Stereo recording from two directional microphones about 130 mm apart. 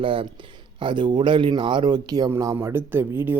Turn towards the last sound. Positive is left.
turn(degrees=-15)  # may be behind; listen again after turning